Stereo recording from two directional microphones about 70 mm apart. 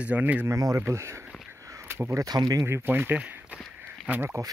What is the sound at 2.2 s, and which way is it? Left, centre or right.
Speech, right.